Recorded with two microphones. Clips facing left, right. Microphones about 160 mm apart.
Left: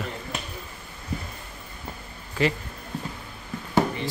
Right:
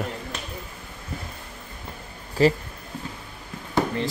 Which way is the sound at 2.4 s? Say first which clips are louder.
Right 5 dB; 35° right (ahead or behind).